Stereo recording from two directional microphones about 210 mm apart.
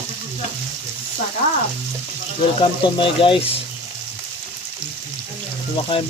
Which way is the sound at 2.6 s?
25° left (ahead or behind).